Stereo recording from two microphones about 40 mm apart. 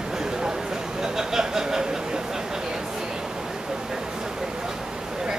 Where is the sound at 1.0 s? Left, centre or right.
Centre.